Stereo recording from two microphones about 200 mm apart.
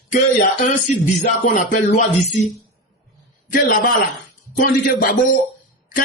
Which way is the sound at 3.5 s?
45° left (ahead or behind).